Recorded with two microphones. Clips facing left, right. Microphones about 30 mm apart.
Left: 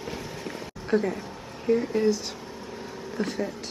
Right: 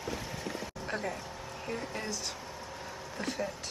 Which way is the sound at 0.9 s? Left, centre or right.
Centre.